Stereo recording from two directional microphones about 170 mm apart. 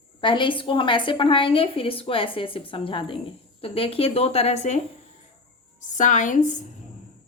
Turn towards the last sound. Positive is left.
turn(degrees=45)  # may be behind; listen again after turning